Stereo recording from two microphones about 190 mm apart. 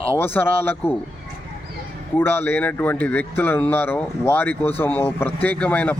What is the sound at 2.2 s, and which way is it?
Speech, 10° left (ahead or behind).